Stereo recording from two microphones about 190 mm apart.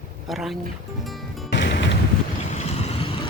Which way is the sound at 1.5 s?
70° left (ahead or behind).